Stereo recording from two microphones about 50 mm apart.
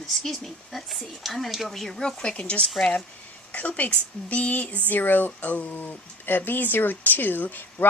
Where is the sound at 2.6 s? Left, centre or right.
Centre.